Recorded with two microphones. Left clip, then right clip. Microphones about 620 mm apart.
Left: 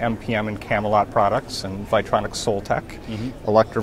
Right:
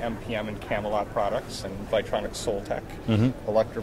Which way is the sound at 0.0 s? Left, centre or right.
Left.